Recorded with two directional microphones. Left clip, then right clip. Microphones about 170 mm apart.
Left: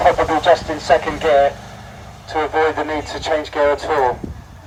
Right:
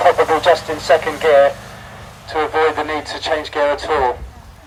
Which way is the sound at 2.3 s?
25° left (ahead or behind).